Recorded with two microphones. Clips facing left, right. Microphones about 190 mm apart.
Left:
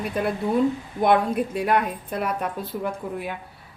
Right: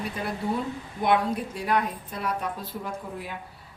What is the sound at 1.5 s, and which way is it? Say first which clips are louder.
Speech: left 3 dB; 55° left (ahead or behind).